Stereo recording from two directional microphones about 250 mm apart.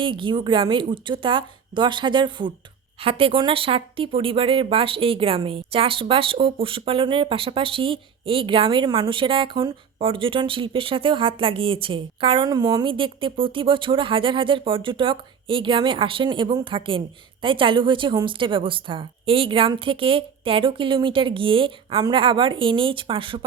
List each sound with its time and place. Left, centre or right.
0.0 s speech: centre